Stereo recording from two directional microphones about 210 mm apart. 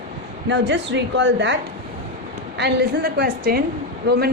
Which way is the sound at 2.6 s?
50° right (ahead or behind).